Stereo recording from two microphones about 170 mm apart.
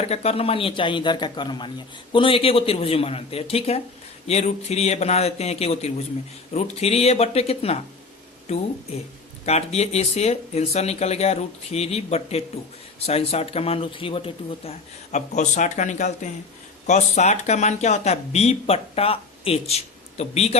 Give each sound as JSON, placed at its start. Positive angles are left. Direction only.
{"t": 0.0, "sound": "a man's voice", "side_deg": 40}